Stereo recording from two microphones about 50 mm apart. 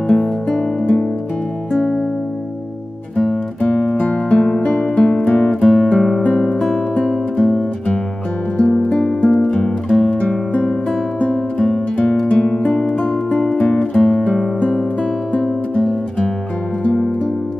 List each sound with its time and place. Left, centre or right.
0.1 s music: centre
3.6 s music: left
4.7 s guitar: centre
6.5 s music: left
11.3 s music: centre
15.7 s music: left